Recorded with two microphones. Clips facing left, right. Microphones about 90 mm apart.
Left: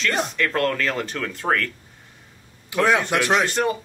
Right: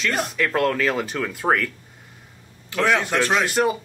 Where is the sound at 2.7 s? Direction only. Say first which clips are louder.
Left 1 dB; 10° left (ahead or behind).